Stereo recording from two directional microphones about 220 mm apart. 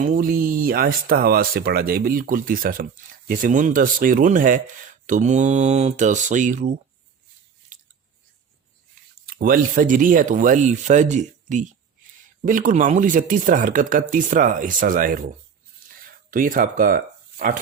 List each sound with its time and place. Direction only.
0.0 s speech: 40° right (ahead or behind)
9.2 s speech: 40° right (ahead or behind)
16.3 s speech: 40° right (ahead or behind)